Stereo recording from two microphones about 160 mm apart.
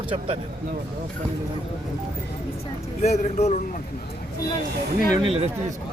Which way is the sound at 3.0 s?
45° left (ahead or behind).